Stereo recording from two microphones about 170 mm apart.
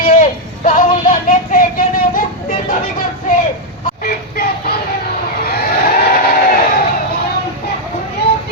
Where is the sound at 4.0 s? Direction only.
65° left (ahead or behind).